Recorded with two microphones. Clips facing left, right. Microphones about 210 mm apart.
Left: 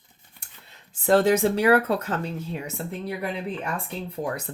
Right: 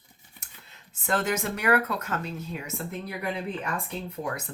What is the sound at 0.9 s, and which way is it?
Speech, 30° left (ahead or behind).